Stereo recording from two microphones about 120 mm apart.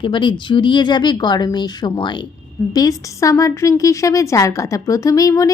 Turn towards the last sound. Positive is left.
turn(degrees=30)  # may be behind; listen again after turning